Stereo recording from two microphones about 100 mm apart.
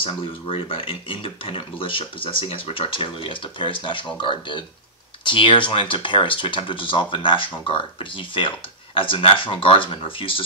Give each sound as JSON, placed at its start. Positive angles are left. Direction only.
{"t": 0.0, "sound": "speech", "side_deg": 65}